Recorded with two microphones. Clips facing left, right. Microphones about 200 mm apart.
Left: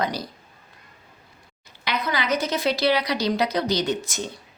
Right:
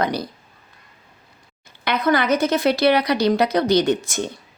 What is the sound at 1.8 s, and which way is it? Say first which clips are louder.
Speech: right 7 dB; 55° right (ahead or behind).